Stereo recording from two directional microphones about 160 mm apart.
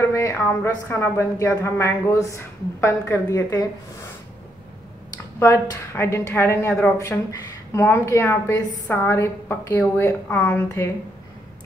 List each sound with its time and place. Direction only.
0.0 s a sound: 15° left (ahead or behind)
0.8 s a woman's voice: 15° left (ahead or behind)
5.1 s a woman's voice: 20° left (ahead or behind)